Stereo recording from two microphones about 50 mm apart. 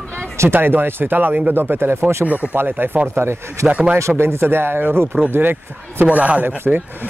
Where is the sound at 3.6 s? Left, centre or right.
Right.